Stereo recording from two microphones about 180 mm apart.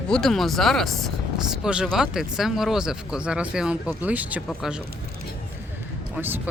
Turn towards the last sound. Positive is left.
turn(degrees=-10)  # may be behind; listen again after turning